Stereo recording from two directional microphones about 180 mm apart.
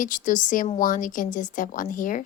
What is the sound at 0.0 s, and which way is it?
A woman's voice, 45° left (ahead or behind).